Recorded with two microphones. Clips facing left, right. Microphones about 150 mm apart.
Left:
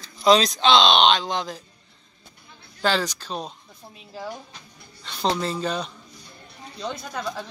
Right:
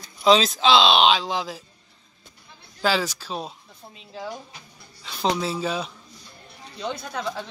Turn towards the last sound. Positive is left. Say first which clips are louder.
# right 1 dB
turn(degrees=0)  # may be behind; listen again after turning